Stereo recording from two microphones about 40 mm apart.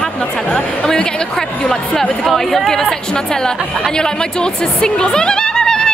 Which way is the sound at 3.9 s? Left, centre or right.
Centre.